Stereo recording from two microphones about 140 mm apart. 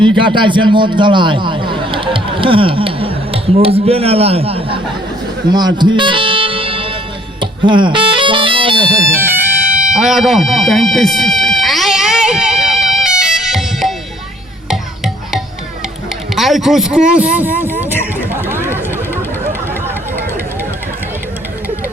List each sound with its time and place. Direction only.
0.0 s speech: 35° right (ahead or behind)
5.5 s music: 30° right (ahead or behind)
7.3 s speech: 35° right (ahead or behind)
9.0 s music: 15° right (ahead or behind); by 15.4 s centre (ahead or behind)
16.3 s speech: centre (ahead or behind)
18.3 s chatter: 15° right (ahead or behind)